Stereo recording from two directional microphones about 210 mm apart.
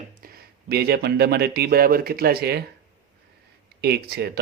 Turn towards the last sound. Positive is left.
turn(degrees=-50)  # may be behind; listen again after turning